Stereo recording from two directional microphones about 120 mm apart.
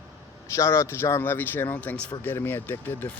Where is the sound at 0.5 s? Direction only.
25° left (ahead or behind).